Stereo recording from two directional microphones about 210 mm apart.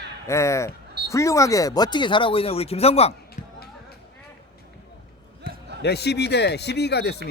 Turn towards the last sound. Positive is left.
turn(degrees=50)  # may be behind; listen again after turning